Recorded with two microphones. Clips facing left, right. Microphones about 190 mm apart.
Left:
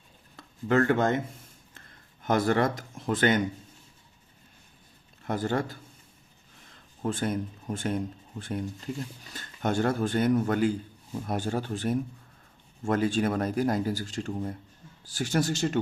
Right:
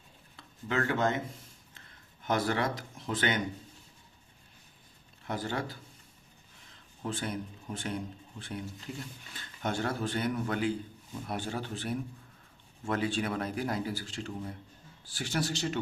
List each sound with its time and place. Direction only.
0.3 s speech: 50° left (ahead or behind)
2.2 s speech: 50° left (ahead or behind)
5.2 s speech: 50° left (ahead or behind)
7.0 s speech: 50° left (ahead or behind)